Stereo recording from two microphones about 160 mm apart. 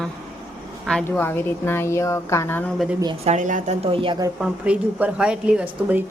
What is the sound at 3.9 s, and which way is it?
Speech, 35° right (ahead or behind).